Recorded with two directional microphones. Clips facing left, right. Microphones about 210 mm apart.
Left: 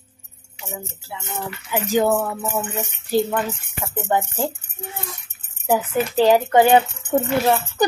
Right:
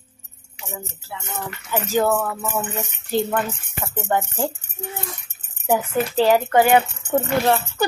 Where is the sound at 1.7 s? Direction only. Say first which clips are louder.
Left 1 dB; 15° left (ahead or behind).